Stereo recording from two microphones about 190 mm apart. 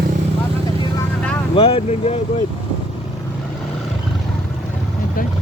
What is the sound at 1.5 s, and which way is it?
Speech, 30° left (ahead or behind).